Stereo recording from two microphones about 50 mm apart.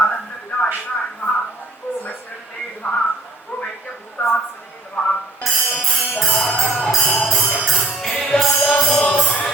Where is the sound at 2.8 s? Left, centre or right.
Left.